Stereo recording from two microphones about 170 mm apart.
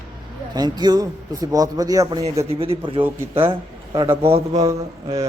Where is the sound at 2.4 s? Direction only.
35° right (ahead or behind).